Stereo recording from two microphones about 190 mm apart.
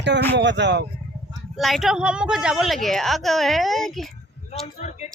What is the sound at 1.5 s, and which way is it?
A woman's voice, centre (ahead or behind).